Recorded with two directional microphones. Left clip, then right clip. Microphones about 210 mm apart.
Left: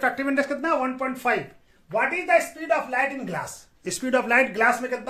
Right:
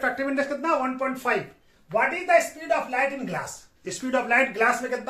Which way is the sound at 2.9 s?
40° left (ahead or behind).